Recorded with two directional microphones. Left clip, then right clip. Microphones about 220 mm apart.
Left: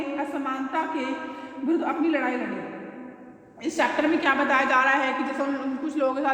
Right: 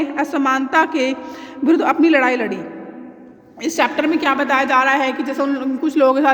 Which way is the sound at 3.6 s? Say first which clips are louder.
Right 6 dB; 45° right (ahead or behind).